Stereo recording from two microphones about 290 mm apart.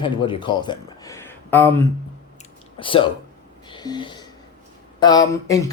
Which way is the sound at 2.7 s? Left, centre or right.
Centre.